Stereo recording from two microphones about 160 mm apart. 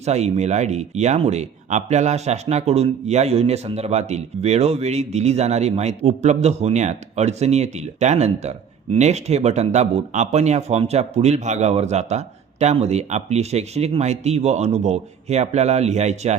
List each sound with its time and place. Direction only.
0.0 s speech: 45° right (ahead or behind)